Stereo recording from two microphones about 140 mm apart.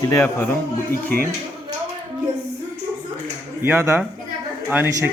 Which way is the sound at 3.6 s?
15° right (ahead or behind).